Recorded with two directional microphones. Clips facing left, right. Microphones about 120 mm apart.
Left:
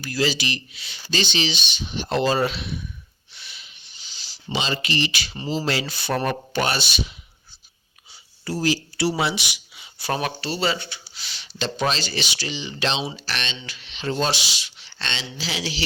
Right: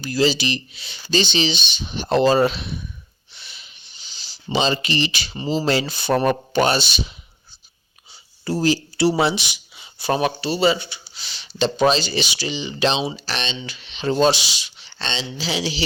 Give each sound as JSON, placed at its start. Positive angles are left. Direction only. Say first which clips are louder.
{"t": 0.0, "sound": "speech", "louder": "right 5 dB", "side_deg": -25}
{"t": 8.4, "sound": "speech", "louder": "right 4 dB", "side_deg": -30}